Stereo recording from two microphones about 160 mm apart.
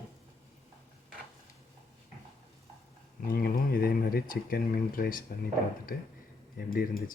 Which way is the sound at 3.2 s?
70° left (ahead or behind).